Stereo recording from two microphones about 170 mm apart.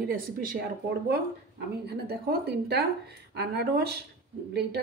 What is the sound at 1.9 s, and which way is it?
Speech, 70° right (ahead or behind).